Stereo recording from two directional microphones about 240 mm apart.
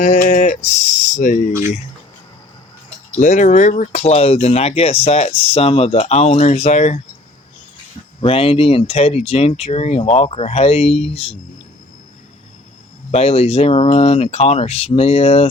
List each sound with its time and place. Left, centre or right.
0.0 s speech: left
3.2 s speech: left
8.2 s speech: left
13.1 s speech: left